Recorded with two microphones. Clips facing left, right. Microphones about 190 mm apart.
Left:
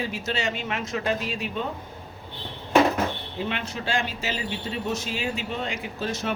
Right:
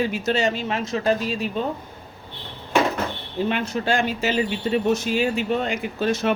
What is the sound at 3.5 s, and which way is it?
Speech, 45° right (ahead or behind).